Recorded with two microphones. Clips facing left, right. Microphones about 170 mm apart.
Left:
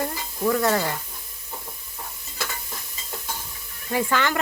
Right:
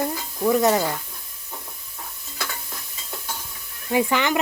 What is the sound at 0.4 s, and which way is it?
Speech, 20° right (ahead or behind).